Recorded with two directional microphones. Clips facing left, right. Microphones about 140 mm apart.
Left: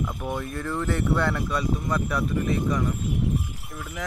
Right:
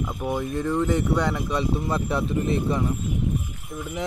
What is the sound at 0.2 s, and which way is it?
Speech, 15° right (ahead or behind).